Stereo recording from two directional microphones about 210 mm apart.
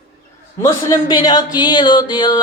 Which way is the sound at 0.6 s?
20° left (ahead or behind).